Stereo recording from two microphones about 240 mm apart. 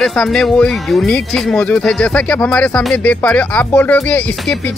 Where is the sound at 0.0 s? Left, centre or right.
Centre.